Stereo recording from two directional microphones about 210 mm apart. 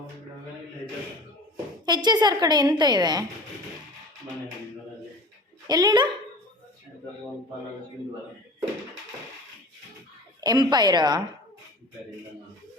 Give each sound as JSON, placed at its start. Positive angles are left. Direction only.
{"t": 1.8, "sound": "a woman's voice", "side_deg": -20}
{"t": 5.6, "sound": "a woman's voice", "side_deg": -20}
{"t": 10.4, "sound": "a woman's voice", "side_deg": -20}